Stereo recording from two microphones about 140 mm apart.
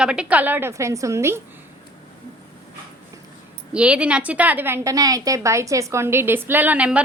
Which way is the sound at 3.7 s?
10° right (ahead or behind).